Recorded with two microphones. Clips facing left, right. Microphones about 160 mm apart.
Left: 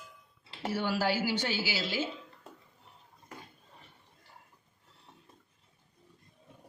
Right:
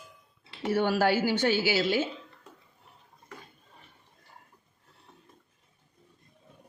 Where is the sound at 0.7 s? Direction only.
55° right (ahead or behind).